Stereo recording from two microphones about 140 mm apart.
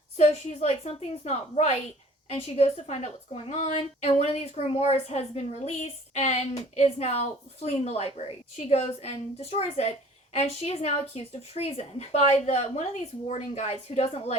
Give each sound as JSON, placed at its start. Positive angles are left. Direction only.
{"t": 0.2, "sound": "a woman's voice", "side_deg": 50}